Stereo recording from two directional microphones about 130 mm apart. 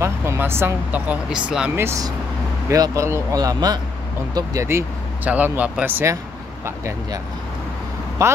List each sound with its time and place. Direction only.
0.0 s speech: 20° right (ahead or behind)
1.8 s speech: 25° right (ahead or behind)
4.6 s speech: 15° right (ahead or behind)
8.2 s speech: 25° right (ahead or behind)